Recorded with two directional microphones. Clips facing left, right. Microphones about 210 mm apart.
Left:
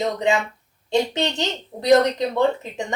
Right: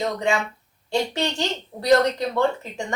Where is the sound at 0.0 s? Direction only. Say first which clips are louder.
Left 2 dB; 20° left (ahead or behind).